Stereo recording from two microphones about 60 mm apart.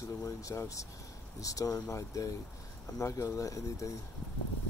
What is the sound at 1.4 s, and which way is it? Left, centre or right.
Speech, left.